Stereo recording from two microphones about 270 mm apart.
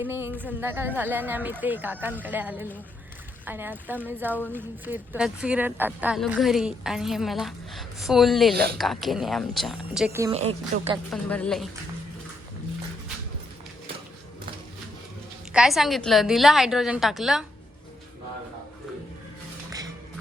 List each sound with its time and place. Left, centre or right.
0.0 s a woman's voice: centre
10.3 s speech: right
10.9 s speech: centre
15.5 s speech: centre